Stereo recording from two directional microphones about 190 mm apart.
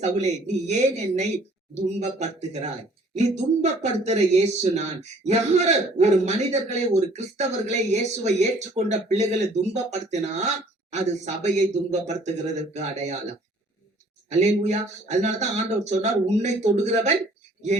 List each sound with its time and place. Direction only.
0.0 s a man's voice: 35° right (ahead or behind)
14.3 s a man's voice: 35° right (ahead or behind)